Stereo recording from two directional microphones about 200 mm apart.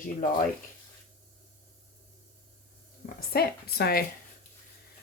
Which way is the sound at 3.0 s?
50° left (ahead or behind).